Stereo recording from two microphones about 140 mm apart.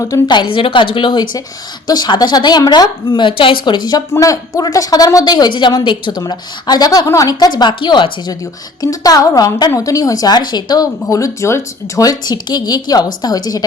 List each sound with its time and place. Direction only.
0.0 s a woman's voice: 30° left (ahead or behind)